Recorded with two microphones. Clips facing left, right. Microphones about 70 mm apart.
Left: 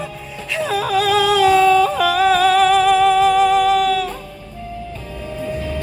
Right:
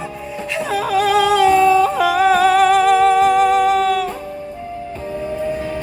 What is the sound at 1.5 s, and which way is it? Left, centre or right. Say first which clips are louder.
Yodeling: even; right.